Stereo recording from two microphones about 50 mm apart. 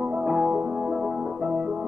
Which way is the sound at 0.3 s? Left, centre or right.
Centre.